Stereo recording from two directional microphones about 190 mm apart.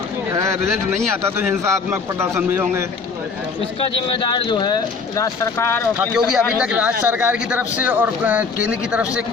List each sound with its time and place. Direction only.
0.3 s a sound: 15° right (ahead or behind)
1.1 s speech: 15° right (ahead or behind)
3.8 s speech: 25° left (ahead or behind)
6.3 s speech: 5° right (ahead or behind)